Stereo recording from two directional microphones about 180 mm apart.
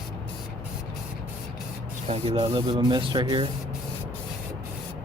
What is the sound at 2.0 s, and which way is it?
Speech, 35° right (ahead or behind).